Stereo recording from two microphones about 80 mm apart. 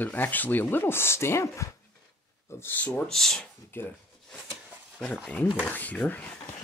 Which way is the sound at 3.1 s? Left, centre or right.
Centre.